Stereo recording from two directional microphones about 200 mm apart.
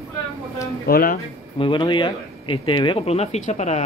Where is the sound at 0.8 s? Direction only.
45° left (ahead or behind).